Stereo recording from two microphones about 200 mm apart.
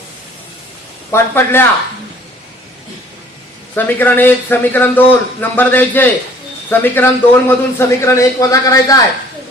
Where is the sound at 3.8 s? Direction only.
10° left (ahead or behind).